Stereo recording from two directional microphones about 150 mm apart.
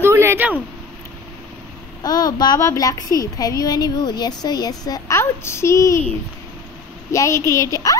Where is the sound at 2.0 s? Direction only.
25° left (ahead or behind).